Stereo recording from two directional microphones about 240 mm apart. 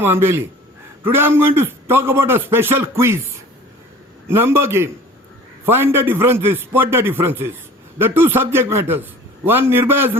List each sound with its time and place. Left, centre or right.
0.0 s a man's voice: centre
4.3 s a man's voice: centre